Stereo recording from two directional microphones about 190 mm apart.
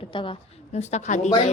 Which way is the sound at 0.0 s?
25° left (ahead or behind).